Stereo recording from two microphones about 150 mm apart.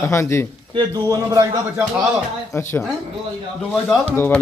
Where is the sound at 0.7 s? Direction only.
25° right (ahead or behind).